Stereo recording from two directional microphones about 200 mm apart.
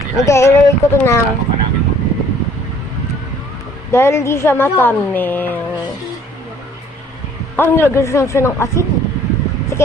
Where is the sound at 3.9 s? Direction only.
15° left (ahead or behind).